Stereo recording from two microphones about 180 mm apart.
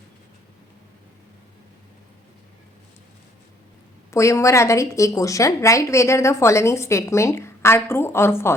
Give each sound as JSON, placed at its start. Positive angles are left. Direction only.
{"t": 4.1, "sound": "a woman's voice", "side_deg": 15}